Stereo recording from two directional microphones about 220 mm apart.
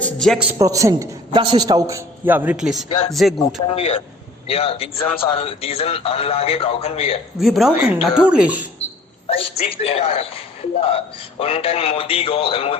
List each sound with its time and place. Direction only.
0.0 s a man's voice: centre (ahead or behind)
3.3 s speech: 25° left (ahead or behind)
7.3 s speech: centre (ahead or behind)
9.3 s speech: 25° left (ahead or behind)